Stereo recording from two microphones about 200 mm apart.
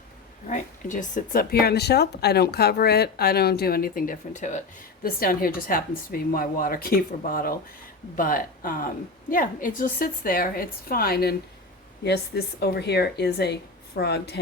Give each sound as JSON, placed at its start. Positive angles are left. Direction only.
{"t": 0.4, "sound": "speech", "side_deg": 40}